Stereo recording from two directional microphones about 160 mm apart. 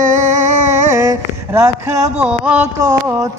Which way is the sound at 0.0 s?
50° right (ahead or behind).